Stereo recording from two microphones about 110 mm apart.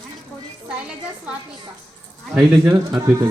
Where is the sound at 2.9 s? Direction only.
30° right (ahead or behind).